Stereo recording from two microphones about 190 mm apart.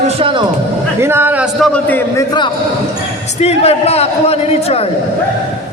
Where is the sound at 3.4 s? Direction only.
35° left (ahead or behind).